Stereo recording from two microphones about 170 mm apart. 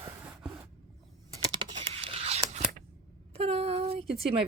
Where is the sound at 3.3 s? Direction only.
35° right (ahead or behind).